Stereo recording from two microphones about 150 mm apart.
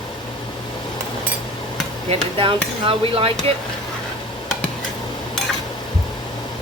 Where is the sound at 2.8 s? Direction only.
40° right (ahead or behind).